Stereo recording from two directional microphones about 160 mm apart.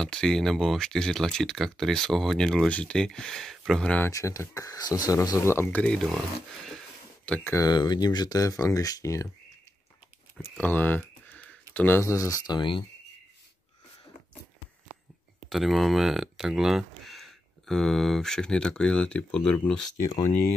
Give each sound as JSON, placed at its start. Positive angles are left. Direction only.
{"t": 0.0, "sound": "speech", "side_deg": 5}
{"t": 4.1, "sound": "speech", "side_deg": 20}
{"t": 7.2, "sound": "speech", "side_deg": 5}
{"t": 7.5, "sound": "speech", "side_deg": 25}
{"t": 10.6, "sound": "speech", "side_deg": 10}
{"t": 15.5, "sound": "speech", "side_deg": 0}